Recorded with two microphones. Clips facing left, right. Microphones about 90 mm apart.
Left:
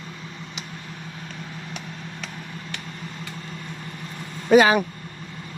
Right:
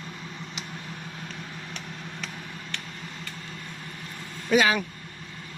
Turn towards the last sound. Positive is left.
turn(degrees=40)  # may be behind; listen again after turning